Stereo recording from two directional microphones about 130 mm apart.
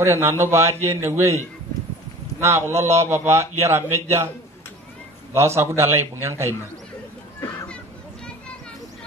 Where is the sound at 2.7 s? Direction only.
20° right (ahead or behind).